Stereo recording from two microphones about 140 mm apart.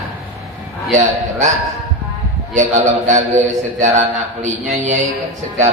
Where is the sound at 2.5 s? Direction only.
60° right (ahead or behind).